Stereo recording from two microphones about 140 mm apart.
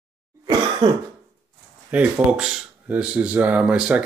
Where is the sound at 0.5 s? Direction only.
30° right (ahead or behind).